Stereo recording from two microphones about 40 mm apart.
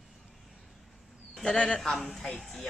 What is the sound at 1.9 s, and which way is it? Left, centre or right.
Speech, centre.